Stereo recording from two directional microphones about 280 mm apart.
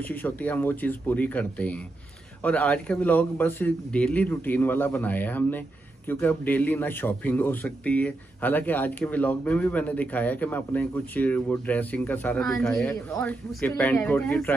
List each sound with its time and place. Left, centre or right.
0.0 s a man's voice: centre